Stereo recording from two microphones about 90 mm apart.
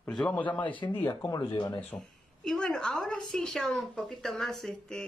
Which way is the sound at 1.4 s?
55° left (ahead or behind).